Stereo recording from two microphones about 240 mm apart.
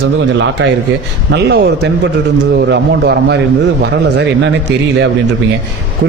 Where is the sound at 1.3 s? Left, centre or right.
Right.